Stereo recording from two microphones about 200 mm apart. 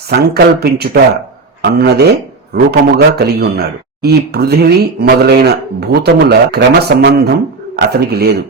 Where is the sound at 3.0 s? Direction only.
55° right (ahead or behind).